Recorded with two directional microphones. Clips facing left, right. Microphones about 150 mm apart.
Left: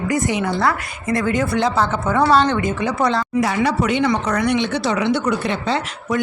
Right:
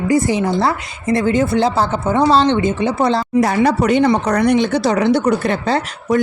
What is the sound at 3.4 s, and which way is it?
Speech, 45° right (ahead or behind).